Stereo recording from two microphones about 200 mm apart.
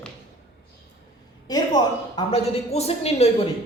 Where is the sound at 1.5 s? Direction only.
20° left (ahead or behind).